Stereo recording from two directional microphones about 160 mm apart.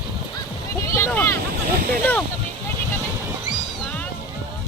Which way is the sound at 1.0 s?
15° left (ahead or behind).